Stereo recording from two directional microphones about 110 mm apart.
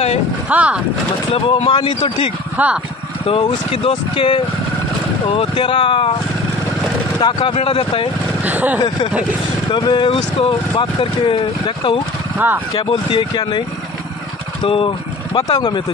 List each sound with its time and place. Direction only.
0.5 s speech: 10° right (ahead or behind)
1.3 s speech: 60° left (ahead or behind)
2.5 s speech: 10° right (ahead or behind)
3.3 s speech: 55° left (ahead or behind)
7.2 s speech: 50° left (ahead or behind)
8.5 s speech: 15° right (ahead or behind)
9.7 s speech: 45° left (ahead or behind)